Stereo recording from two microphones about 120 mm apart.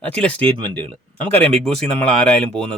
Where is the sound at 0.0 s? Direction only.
10° left (ahead or behind).